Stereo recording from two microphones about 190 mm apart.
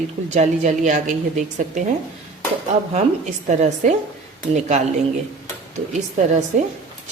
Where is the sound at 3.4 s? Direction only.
40° right (ahead or behind).